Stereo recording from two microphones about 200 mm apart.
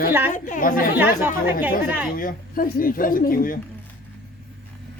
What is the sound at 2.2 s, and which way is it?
Speech, 45° left (ahead or behind).